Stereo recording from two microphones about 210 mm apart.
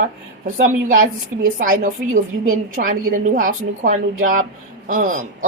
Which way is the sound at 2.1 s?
75° right (ahead or behind).